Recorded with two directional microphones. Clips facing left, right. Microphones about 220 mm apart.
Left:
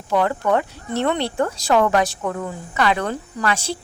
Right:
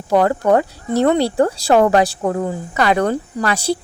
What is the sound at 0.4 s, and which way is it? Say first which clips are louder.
A woman's voice: right 5 dB; 40° right (ahead or behind).